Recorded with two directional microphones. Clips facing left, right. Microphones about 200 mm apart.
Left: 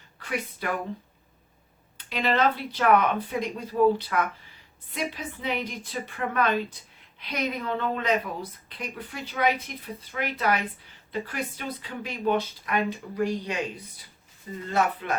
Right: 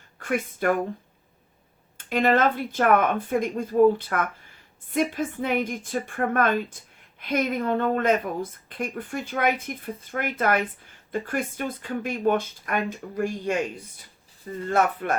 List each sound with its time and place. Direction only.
0.2 s speech: 50° right (ahead or behind)
2.0 s a woman's voice: 50° right (ahead or behind)